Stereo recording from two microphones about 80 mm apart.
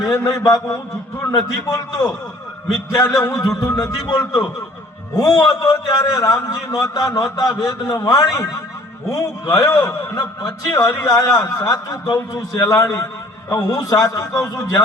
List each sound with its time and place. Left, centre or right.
0.0 s a man's voice: left
0.4 s a man's voice: left